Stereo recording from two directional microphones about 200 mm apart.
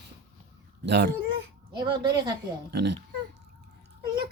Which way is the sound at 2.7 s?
55° right (ahead or behind).